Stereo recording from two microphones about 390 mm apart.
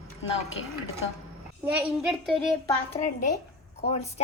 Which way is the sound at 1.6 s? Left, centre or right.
Centre.